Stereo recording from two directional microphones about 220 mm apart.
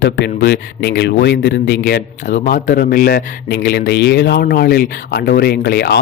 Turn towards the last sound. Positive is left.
turn(degrees=50)  # may be behind; listen again after turning